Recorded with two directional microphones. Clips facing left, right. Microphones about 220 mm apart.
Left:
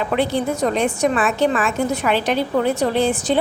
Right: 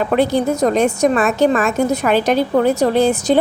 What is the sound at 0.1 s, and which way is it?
A woman's voice, 40° right (ahead or behind).